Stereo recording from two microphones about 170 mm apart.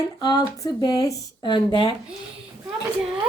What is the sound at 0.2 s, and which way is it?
Speech, 25° left (ahead or behind).